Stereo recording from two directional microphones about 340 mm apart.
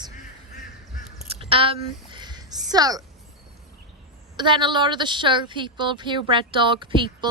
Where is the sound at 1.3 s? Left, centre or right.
Centre.